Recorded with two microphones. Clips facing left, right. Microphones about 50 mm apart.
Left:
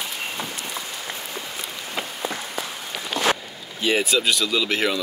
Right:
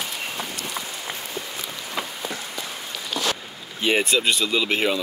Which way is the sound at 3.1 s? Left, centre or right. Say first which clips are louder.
Left 3 dB; left.